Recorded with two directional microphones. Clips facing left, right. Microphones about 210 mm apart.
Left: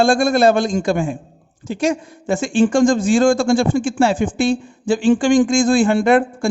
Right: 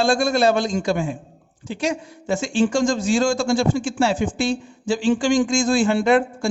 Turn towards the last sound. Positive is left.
turn(degrees=55)  # may be behind; listen again after turning